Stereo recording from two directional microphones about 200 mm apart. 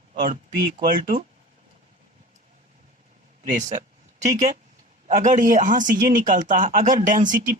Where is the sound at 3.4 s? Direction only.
40° right (ahead or behind).